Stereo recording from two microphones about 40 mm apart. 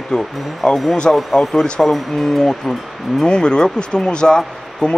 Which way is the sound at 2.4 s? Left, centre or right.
Centre.